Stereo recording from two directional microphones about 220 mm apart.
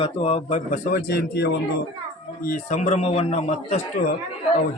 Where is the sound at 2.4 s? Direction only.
35° left (ahead or behind).